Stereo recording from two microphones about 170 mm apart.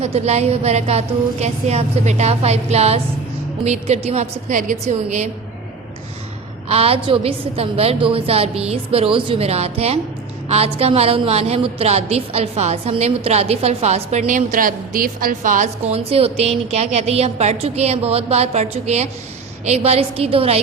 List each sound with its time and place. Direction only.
0.0 s a woman's voice: 40° right (ahead or behind)
6.7 s a woman's voice: 35° right (ahead or behind)